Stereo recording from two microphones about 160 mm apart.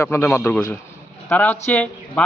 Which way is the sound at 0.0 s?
15° left (ahead or behind).